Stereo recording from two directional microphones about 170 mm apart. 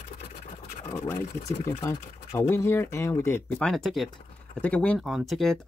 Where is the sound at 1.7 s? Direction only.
30° left (ahead or behind).